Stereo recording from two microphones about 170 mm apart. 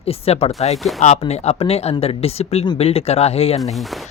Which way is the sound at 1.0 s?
40° left (ahead or behind).